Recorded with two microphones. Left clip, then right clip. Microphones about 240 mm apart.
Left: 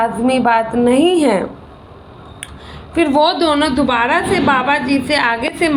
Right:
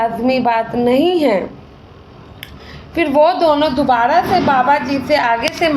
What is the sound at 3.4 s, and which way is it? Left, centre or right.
Speech, left.